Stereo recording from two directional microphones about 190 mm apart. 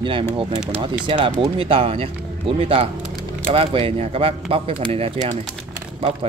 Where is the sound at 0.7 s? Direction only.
30° right (ahead or behind).